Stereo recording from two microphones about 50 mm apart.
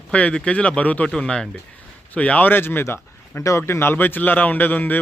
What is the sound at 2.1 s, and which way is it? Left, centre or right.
Speech, left.